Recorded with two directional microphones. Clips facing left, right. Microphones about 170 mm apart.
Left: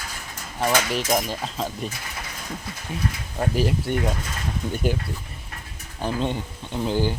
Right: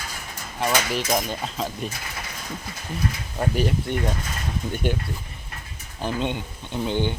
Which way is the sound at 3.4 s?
Centre (ahead or behind).